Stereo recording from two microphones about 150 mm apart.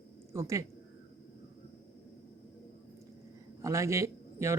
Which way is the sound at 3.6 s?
20° right (ahead or behind).